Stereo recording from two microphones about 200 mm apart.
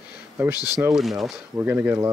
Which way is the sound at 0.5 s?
20° left (ahead or behind).